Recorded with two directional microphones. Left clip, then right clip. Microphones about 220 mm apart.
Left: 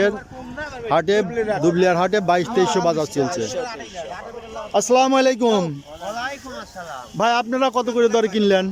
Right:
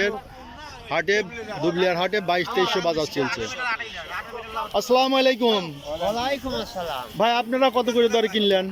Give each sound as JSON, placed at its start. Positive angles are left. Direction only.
{"t": 0.9, "sound": "speech", "side_deg": 15}
{"t": 3.4, "sound": "speech", "side_deg": 45}
{"t": 4.7, "sound": "speech", "side_deg": 10}
{"t": 6.0, "sound": "speech", "side_deg": -15}
{"t": 7.2, "sound": "speech", "side_deg": 10}